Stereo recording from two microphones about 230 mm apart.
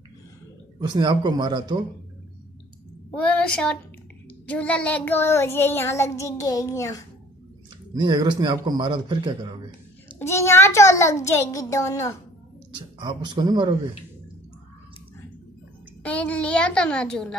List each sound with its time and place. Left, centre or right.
0.7 s a man's voice: centre
3.3 s a woman's voice: centre
4.5 s child singing: centre
7.9 s a man's voice: centre
10.1 s child singing: centre
12.7 s a man's voice: centre
16.0 s a woman's voice: centre